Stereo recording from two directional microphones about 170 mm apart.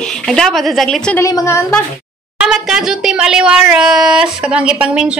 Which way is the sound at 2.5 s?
Centre (ahead or behind).